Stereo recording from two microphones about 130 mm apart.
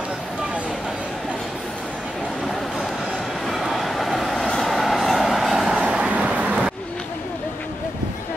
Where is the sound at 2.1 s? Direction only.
Centre (ahead or behind).